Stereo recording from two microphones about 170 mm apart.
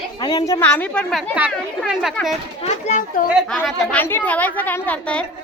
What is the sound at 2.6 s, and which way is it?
Speech, 40° left (ahead or behind).